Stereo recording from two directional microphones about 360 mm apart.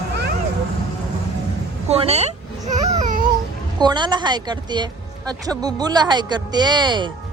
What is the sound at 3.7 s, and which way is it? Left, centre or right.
Speech, centre.